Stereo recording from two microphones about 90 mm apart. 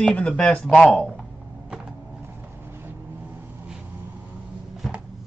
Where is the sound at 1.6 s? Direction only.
10° right (ahead or behind).